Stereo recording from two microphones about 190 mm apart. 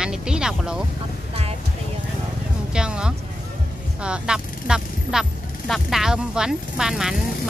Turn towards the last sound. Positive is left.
turn(degrees=-5)  # may be behind; listen again after turning